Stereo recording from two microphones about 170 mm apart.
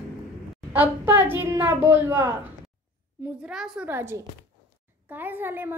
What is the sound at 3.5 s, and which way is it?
A woman's voice, 5° right (ahead or behind).